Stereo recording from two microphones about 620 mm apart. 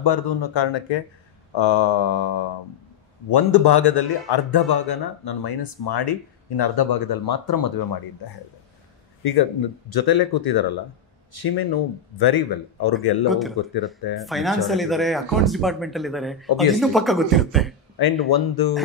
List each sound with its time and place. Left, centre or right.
0.0 s a man's voice: left
9.2 s a man's voice: left
13.3 s speech: centre
17.9 s a man's voice: left